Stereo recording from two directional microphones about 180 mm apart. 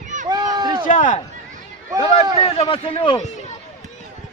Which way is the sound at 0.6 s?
25° right (ahead or behind).